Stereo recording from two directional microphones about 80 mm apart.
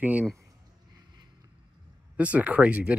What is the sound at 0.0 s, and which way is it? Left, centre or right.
Speech, right.